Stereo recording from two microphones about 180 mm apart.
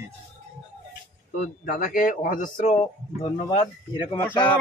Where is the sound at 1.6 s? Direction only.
50° left (ahead or behind); by 4.2 s 25° left (ahead or behind).